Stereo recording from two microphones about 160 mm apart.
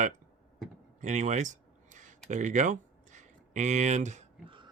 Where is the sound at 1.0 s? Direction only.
50° right (ahead or behind).